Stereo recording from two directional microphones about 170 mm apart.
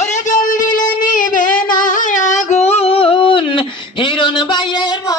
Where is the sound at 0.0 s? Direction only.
45° left (ahead or behind).